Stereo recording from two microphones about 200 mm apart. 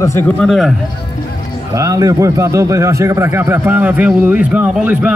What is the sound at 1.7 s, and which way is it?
Speech, 15° right (ahead or behind).